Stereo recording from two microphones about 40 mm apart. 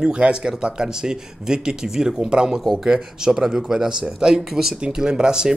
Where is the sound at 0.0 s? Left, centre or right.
Right.